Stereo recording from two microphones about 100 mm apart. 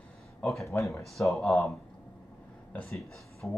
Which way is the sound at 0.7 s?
30° left (ahead or behind).